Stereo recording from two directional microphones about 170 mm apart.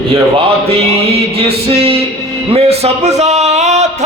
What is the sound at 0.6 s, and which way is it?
Speech, 35° right (ahead or behind).